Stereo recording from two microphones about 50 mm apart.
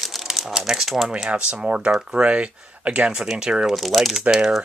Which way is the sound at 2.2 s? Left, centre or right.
Right.